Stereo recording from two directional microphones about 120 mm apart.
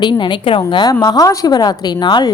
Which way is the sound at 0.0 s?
40° left (ahead or behind).